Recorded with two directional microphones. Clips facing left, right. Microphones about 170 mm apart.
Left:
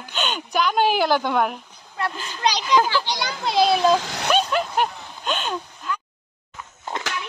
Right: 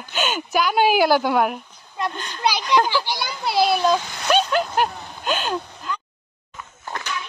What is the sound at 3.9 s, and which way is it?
Speech, 90° left.